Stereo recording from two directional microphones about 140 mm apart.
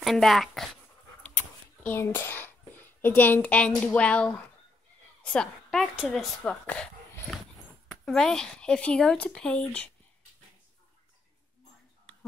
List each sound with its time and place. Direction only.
0.0 s speech: centre (ahead or behind)